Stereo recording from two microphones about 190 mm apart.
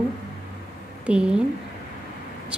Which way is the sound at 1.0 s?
5° right (ahead or behind).